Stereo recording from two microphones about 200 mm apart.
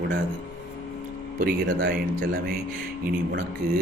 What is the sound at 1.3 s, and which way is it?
Speech, 50° right (ahead or behind).